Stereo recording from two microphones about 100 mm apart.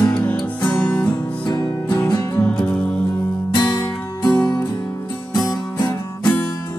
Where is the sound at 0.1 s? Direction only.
15° left (ahead or behind).